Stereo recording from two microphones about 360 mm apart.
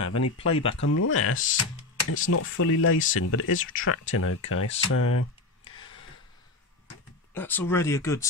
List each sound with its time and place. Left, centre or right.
0.0 s speech: left
0.4 s speech: centre
0.7 s speech: left
5.6 s a sound: centre
7.3 s speech: centre